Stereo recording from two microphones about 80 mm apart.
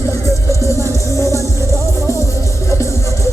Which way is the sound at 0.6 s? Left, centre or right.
Left.